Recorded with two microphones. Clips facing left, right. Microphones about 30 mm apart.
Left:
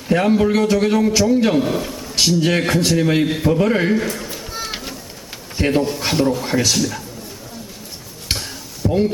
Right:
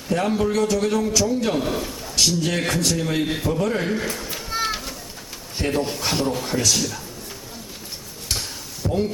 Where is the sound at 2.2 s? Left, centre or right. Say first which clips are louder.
Left 5 dB; left.